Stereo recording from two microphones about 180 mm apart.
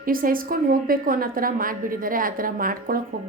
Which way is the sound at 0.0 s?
50° right (ahead or behind).